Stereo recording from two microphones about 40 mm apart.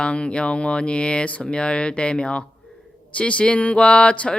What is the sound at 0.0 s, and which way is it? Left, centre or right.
Speech, left.